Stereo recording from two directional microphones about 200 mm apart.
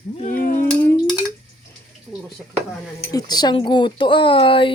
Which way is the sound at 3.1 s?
20° left (ahead or behind).